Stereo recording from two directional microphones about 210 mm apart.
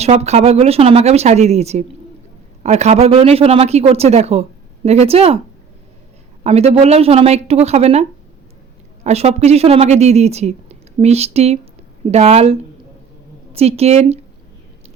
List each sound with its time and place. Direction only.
0.0 s a woman's voice: 30° right (ahead or behind)
6.4 s speech: 30° right (ahead or behind)
9.0 s a woman's voice: 30° right (ahead or behind)